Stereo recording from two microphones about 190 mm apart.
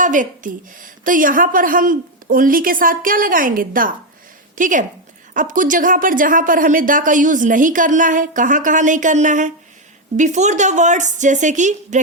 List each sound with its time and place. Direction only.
0.0 s a woman's voice: 45° right (ahead or behind)